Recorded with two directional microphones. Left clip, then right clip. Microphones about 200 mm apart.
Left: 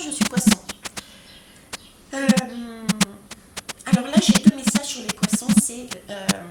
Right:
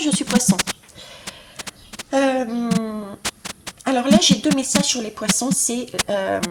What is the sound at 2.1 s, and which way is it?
A woman's voice, 40° right (ahead or behind).